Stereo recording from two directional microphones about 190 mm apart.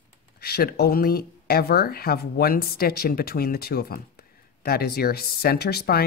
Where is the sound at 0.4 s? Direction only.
55° left (ahead or behind).